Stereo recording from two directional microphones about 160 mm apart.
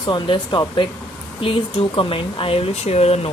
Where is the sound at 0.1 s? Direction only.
30° left (ahead or behind).